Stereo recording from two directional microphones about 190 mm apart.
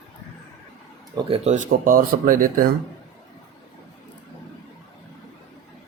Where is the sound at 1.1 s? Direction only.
30° right (ahead or behind); by 2.7 s 45° right (ahead or behind).